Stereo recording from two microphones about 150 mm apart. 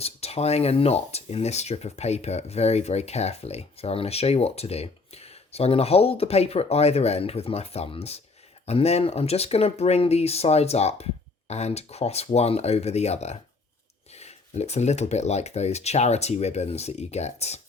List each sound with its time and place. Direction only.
0.0 s speech: 45° left (ahead or behind)